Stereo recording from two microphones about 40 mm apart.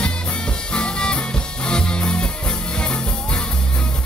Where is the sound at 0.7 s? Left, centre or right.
Left.